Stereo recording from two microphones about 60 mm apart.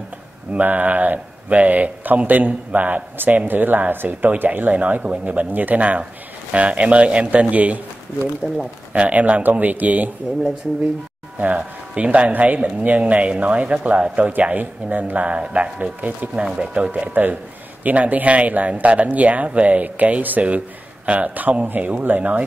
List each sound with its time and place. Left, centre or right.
0.5 s speech: right
8.9 s speech: right
11.3 s speech: right